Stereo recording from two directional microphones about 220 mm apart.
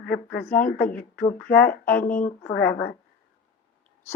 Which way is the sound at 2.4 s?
10° left (ahead or behind).